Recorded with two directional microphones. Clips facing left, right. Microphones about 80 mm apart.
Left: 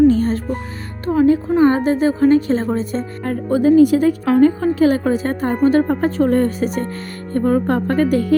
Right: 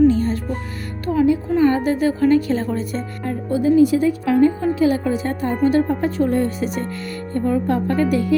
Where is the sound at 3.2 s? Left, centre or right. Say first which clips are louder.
Left 4 dB; left.